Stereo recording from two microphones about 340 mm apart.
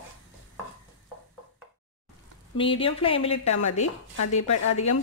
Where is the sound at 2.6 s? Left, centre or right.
Centre.